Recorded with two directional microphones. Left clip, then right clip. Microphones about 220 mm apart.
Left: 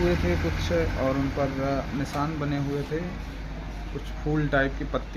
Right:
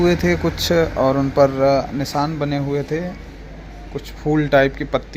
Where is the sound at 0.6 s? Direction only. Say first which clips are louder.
Right 11 dB; 40° right (ahead or behind).